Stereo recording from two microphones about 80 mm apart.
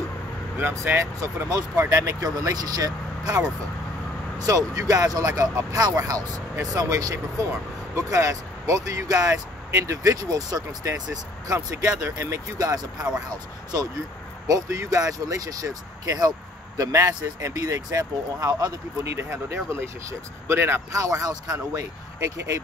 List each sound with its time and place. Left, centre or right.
0.8 s speech: right
1.5 s speech: right
14.5 s speech: right
19.5 s speech: right
20.9 s speech: right